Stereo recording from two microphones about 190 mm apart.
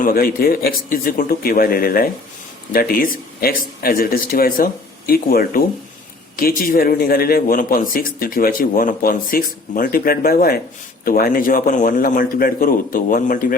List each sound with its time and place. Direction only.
0.0 s a man's voice: 50° left (ahead or behind)